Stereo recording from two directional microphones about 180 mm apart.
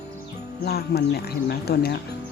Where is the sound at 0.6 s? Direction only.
60° left (ahead or behind).